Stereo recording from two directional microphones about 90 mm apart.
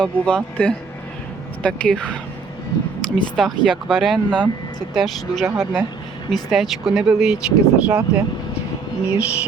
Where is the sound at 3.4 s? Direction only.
Centre (ahead or behind).